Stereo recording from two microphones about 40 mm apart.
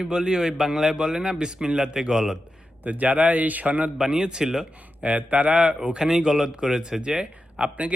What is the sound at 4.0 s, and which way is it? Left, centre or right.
Speech, centre.